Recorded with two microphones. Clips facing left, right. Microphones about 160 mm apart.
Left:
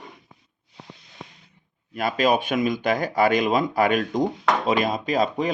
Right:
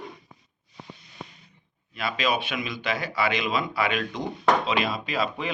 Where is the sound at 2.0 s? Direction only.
45° left (ahead or behind).